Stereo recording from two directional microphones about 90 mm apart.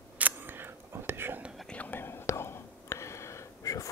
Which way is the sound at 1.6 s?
15° left (ahead or behind).